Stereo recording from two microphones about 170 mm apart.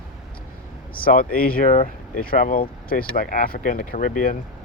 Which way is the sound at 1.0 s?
55° left (ahead or behind).